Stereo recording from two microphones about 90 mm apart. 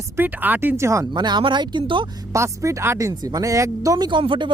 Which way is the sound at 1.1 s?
55° right (ahead or behind).